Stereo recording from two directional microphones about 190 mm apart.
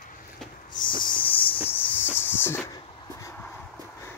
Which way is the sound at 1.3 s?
30° left (ahead or behind).